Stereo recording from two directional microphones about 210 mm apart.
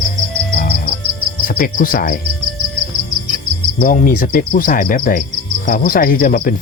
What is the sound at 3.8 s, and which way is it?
Speech, 40° left (ahead or behind).